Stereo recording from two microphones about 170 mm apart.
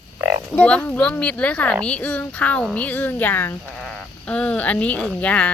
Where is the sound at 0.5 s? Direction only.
10° left (ahead or behind).